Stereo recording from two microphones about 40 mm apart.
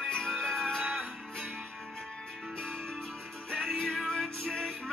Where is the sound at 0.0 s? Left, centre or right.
Centre.